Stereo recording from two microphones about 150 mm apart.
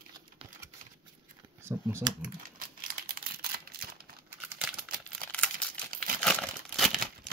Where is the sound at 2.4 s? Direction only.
70° right (ahead or behind); by 4.0 s 90° right.